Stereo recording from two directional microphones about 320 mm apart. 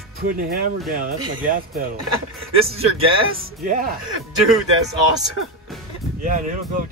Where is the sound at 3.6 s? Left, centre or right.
Right.